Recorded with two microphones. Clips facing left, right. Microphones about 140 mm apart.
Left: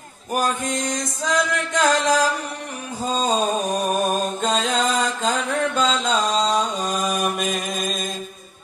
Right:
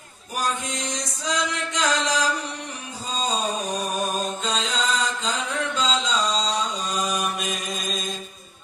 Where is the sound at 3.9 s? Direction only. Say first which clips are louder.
Left 5 dB; 50° left (ahead or behind).